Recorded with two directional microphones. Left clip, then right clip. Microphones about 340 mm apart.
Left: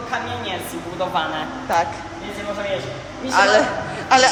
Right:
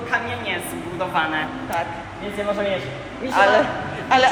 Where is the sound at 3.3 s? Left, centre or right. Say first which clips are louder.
Left 1 dB; centre.